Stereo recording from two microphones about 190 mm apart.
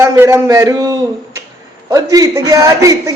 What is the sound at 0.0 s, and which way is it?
A man's voice, 15° right (ahead or behind).